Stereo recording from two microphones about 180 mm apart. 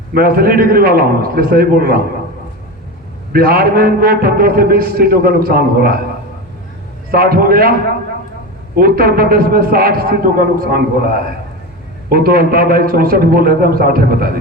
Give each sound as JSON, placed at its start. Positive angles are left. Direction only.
{"t": 0.1, "sound": "a man's voice", "side_deg": -55}
{"t": 3.3, "sound": "a man's voice", "side_deg": -55}
{"t": 7.1, "sound": "a man's voice", "side_deg": -55}
{"t": 8.8, "sound": "a man's voice", "side_deg": -55}